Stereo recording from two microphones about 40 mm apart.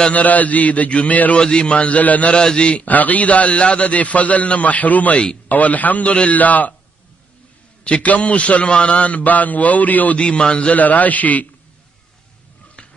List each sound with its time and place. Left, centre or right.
0.1 s a man's voice: left
1.4 s a man's voice: left
2.3 s a man's voice: left
2.9 s a man's voice: left
7.8 s a man's voice: left
10.1 s a man's voice: left
10.7 s a man's voice: left